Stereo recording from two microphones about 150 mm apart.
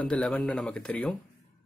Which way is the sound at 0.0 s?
10° left (ahead or behind).